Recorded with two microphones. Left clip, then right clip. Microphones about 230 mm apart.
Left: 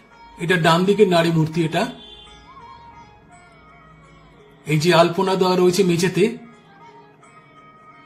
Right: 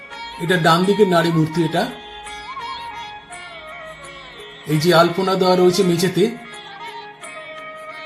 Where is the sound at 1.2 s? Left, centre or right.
Centre.